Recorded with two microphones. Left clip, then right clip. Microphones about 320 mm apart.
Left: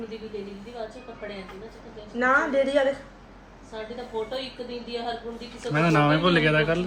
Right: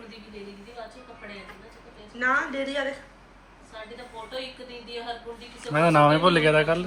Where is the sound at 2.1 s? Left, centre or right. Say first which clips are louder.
Left 4 dB; left.